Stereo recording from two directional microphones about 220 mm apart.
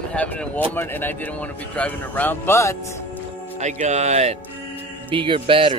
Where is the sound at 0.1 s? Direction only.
5° left (ahead or behind).